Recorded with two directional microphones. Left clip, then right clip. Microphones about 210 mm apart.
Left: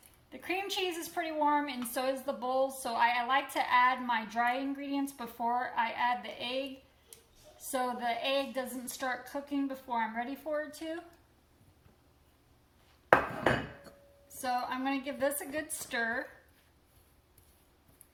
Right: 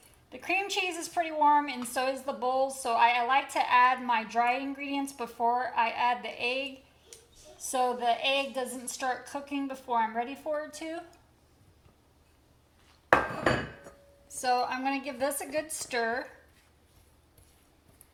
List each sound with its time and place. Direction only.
0.3 s a woman's voice: 25° right (ahead or behind)
7.7 s a woman's voice: 25° right (ahead or behind)
14.4 s a woman's voice: 30° right (ahead or behind)